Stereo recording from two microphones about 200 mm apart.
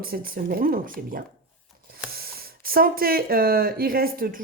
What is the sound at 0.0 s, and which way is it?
Speech, 45° right (ahead or behind).